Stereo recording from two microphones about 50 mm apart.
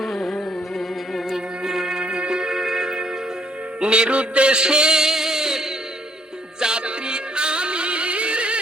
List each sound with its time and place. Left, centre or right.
0.0 s carnatic music: centre
1.3 s music: centre
3.8 s a sound: centre
6.6 s music: centre